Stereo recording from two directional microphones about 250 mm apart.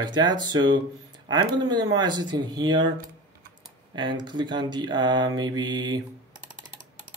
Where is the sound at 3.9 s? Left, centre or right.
Centre.